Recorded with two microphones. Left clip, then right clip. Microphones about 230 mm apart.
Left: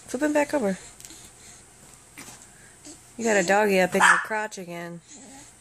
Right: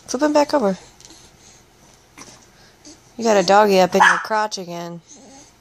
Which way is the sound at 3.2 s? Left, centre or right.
Centre.